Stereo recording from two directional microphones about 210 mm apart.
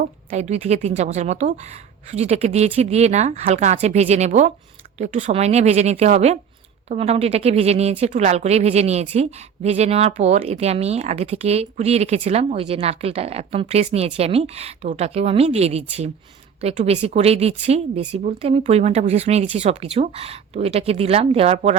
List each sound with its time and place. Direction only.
0.3 s a woman's voice: 30° right (ahead or behind)